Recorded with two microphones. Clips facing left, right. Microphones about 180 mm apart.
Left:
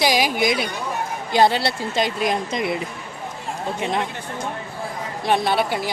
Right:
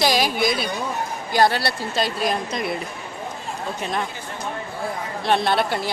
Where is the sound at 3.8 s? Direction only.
20° left (ahead or behind).